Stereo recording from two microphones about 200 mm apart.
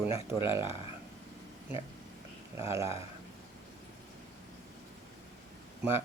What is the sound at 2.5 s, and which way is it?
Speech, 15° right (ahead or behind).